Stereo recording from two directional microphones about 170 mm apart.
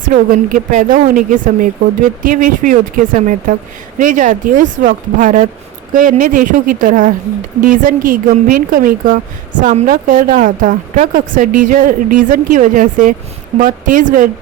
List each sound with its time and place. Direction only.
0.0 s speech: 50° right (ahead or behind)
2.2 s a woman's voice: 55° right (ahead or behind)